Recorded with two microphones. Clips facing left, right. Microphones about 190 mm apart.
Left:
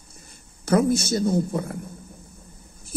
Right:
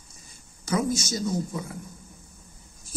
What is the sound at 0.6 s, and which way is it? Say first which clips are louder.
Speech: left 6 dB; 60° left (ahead or behind).